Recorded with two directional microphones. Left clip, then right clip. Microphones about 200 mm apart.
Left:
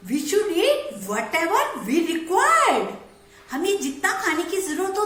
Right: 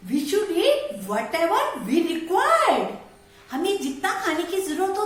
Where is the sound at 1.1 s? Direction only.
10° right (ahead or behind).